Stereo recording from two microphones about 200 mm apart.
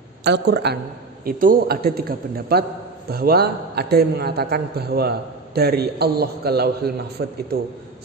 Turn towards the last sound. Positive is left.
turn(degrees=-55)  # may be behind; listen again after turning